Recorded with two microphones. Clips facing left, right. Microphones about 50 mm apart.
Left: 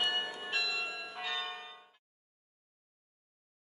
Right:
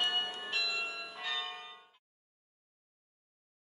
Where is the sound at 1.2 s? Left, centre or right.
Centre.